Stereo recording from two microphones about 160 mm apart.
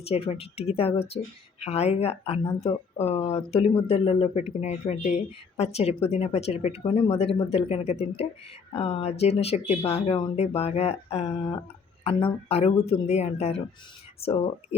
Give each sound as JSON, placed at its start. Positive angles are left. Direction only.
{"t": 0.1, "sound": "speech", "side_deg": 40}